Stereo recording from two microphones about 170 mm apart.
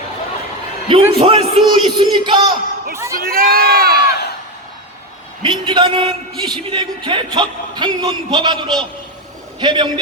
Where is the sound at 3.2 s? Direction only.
60° right (ahead or behind).